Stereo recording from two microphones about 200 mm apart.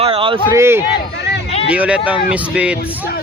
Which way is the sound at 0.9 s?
55° left (ahead or behind).